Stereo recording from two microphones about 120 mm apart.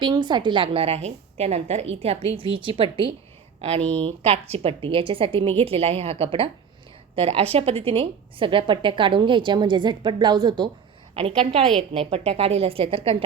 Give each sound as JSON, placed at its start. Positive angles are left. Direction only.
{"t": 0.0, "sound": "a woman's voice", "side_deg": -40}
{"t": 11.1, "sound": "a woman's voice", "side_deg": -50}